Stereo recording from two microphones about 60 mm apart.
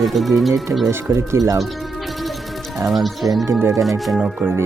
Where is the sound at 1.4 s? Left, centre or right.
Right.